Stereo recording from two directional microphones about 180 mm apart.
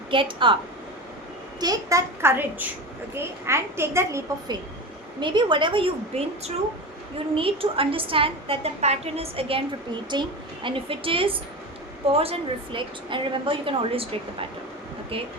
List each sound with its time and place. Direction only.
0.1 s a woman's voice: 30° right (ahead or behind)
1.5 s a woman's voice: 20° right (ahead or behind)
5.2 s a woman's voice: 25° right (ahead or behind)